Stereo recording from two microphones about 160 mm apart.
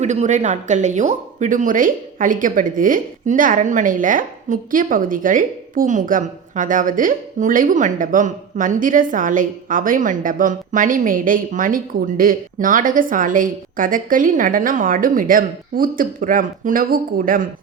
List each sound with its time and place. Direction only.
0.0 s speech: 45° right (ahead or behind)